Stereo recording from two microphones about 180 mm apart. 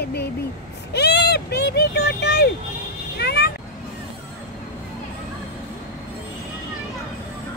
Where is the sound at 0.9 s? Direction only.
70° left (ahead or behind).